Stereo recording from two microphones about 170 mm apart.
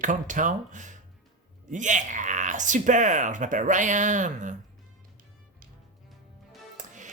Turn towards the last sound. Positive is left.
turn(degrees=-45)  # may be behind; listen again after turning